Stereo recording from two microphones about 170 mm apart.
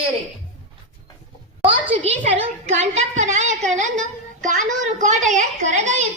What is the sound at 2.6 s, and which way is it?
Child singing, 40° right (ahead or behind).